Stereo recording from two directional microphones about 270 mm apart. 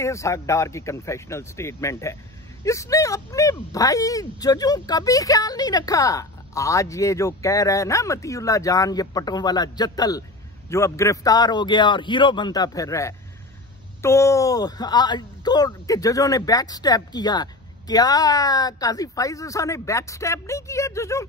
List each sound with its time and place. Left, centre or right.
0.0 s speech: centre